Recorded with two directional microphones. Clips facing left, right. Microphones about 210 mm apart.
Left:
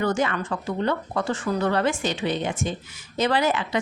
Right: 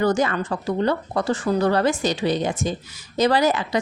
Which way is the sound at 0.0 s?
40° right (ahead or behind).